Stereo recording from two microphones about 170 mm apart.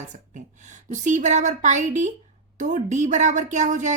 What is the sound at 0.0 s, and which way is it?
A woman's voice, 45° right (ahead or behind).